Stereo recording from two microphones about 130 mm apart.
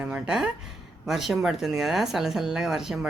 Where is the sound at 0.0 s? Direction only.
10° right (ahead or behind).